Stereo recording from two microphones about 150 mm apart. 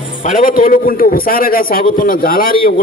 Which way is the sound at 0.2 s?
65° left (ahead or behind).